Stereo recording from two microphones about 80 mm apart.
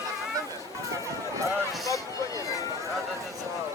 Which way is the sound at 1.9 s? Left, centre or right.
Left.